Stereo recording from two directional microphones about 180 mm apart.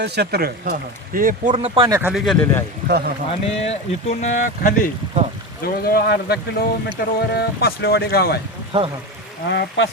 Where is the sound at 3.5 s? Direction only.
35° left (ahead or behind).